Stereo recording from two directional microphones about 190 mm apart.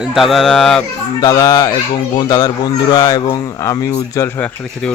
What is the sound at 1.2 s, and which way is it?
Speech, 20° left (ahead or behind).